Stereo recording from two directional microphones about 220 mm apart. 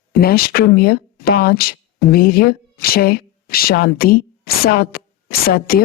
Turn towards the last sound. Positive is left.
turn(degrees=45)  # may be behind; listen again after turning